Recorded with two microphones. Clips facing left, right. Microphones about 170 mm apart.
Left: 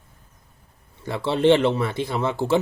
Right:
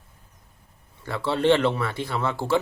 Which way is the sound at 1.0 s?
20° left (ahead or behind).